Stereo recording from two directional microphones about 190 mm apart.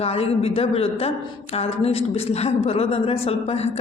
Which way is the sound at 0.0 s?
30° left (ahead or behind).